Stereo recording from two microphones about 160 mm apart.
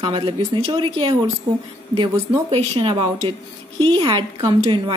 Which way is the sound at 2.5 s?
35° right (ahead or behind).